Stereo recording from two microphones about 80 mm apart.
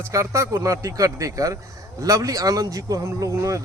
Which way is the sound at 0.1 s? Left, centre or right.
Right.